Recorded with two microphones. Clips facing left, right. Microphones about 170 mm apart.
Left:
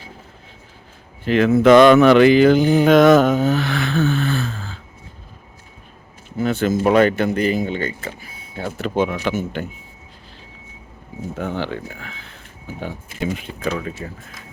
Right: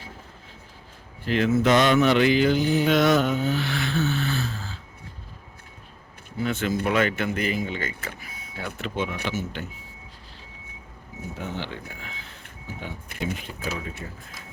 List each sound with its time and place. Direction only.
1.3 s mantra: 65° left (ahead or behind)
6.4 s speech: 40° left (ahead or behind)
9.2 s mantra: 50° left (ahead or behind)
11.3 s speech: 55° left (ahead or behind)
14.0 s speech: 90° left